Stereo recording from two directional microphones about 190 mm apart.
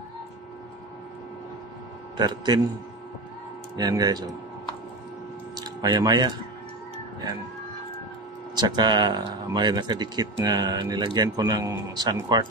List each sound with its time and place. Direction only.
2.1 s speech: 20° right (ahead or behind)
3.7 s speech: 20° right (ahead or behind)
5.6 s speech: 20° right (ahead or behind)
8.5 s speech: 20° right (ahead or behind)